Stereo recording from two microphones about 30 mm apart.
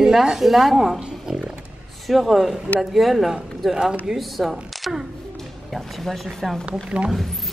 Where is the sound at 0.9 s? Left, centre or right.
Centre.